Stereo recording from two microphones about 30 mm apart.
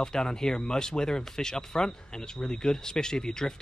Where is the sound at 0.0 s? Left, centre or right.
Left.